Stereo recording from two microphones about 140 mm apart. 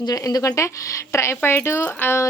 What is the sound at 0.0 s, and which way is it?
Speech, 25° left (ahead or behind).